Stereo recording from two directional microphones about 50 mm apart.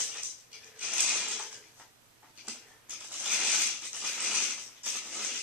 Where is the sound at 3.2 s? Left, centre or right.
Centre.